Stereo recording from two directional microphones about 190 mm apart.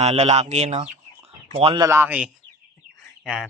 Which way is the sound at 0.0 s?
35° right (ahead or behind).